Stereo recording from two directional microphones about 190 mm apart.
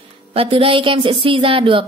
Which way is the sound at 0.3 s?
30° right (ahead or behind).